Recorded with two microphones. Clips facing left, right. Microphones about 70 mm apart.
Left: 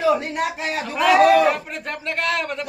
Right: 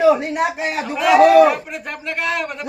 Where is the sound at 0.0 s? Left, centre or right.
Centre.